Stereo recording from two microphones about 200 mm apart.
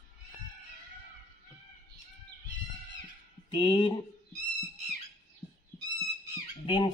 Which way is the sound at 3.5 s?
25° left (ahead or behind).